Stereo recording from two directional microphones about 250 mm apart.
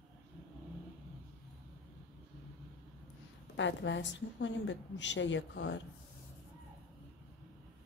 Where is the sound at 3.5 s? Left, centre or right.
Left.